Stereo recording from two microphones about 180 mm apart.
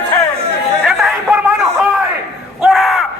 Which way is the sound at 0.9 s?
Centre (ahead or behind).